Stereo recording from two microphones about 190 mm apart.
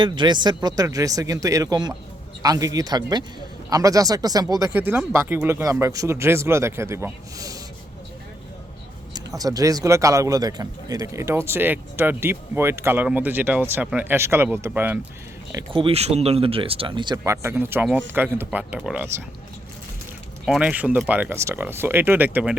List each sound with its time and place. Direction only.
0.0 s a man's voice: 25° right (ahead or behind)
9.1 s a man's voice: 20° right (ahead or behind)
15.5 s speech: 25° right (ahead or behind)
17.3 s a man's voice: 10° right (ahead or behind)
20.4 s a man's voice: 5° right (ahead or behind)